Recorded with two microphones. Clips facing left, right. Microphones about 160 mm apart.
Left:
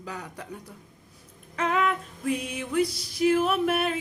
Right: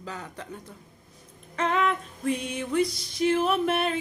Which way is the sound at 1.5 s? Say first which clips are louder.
Even; 5° left (ahead or behind).